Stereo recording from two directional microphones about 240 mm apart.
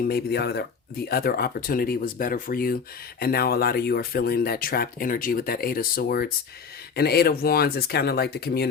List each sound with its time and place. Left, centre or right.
0.1 s speech: left